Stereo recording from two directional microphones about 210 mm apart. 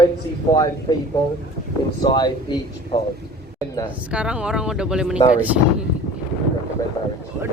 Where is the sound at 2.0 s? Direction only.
20° left (ahead or behind).